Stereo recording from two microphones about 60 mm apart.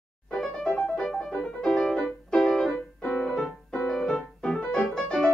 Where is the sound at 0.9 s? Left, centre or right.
Centre.